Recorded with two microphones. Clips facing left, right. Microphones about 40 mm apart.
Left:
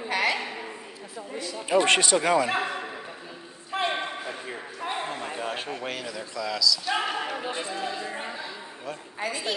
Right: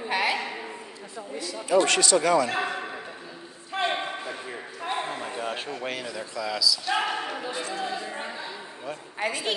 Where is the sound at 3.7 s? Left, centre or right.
Centre.